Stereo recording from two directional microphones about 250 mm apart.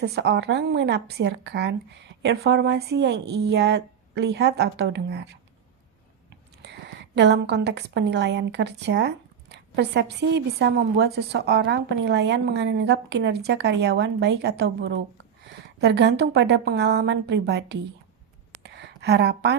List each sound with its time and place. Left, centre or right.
0.0 s a woman's voice: right
7.2 s a woman's voice: right
18.6 s a sound: right